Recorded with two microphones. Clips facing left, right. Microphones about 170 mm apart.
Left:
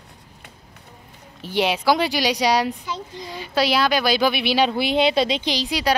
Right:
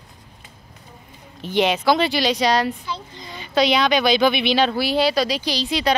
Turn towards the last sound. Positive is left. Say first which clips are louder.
# right 1 dB
turn(degrees=10)  # may be behind; listen again after turning